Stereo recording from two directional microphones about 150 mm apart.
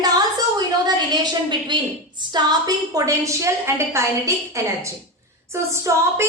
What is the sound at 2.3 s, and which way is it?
A woman's voice, 25° right (ahead or behind).